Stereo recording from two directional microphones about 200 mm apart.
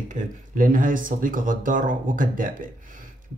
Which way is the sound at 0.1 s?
40° right (ahead or behind).